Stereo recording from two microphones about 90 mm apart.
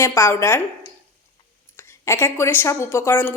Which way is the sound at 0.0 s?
30° left (ahead or behind).